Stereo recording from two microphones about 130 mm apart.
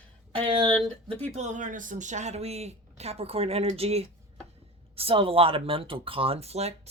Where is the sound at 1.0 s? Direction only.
50° right (ahead or behind).